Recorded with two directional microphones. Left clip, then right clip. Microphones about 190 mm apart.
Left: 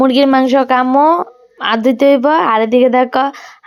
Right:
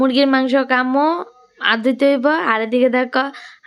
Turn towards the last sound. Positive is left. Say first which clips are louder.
# left 5 dB
turn(degrees=10)  # may be behind; listen again after turning